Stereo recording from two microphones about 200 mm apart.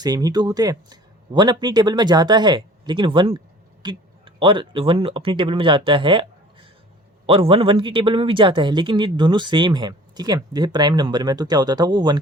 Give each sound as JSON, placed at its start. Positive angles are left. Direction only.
{"t": 0.0, "sound": "speech", "side_deg": -20}